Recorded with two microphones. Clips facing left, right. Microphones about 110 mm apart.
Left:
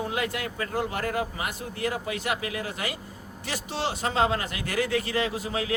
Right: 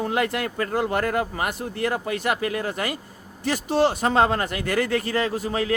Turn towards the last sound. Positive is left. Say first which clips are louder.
# right 5 dB
turn(degrees=-45)  # may be behind; listen again after turning